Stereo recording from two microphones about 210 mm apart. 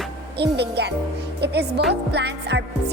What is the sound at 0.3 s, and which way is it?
Speech, 50° right (ahead or behind).